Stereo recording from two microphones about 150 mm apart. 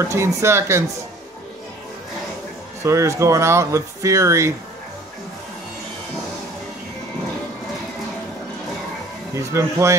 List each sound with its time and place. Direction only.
0.0 s speech: 20° right (ahead or behind)
2.8 s speech: 20° right (ahead or behind)
9.3 s speech: 20° right (ahead or behind)